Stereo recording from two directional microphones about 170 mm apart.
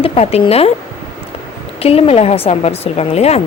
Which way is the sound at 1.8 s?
35° left (ahead or behind).